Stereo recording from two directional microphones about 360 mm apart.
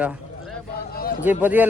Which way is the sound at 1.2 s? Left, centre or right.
Centre.